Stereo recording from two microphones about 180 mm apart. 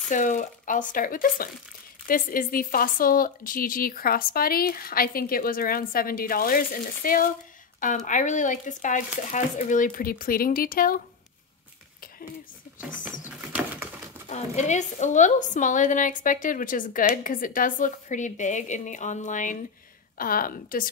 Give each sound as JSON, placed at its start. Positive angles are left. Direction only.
{"t": 0.1, "sound": "a woman's voice", "side_deg": 45}
{"t": 13.5, "sound": "pigeon", "side_deg": -10}
{"t": 14.3, "sound": "a woman's voice", "side_deg": 40}